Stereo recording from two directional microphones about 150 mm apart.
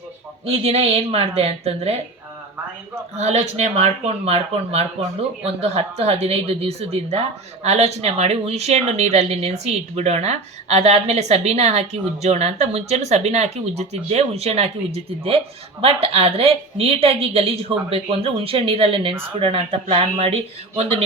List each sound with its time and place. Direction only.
0.4 s speech: 45° right (ahead or behind)
3.2 s a woman's voice: 45° right (ahead or behind)